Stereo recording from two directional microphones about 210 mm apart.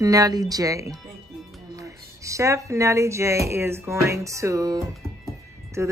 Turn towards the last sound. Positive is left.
turn(degrees=-15)  # may be behind; listen again after turning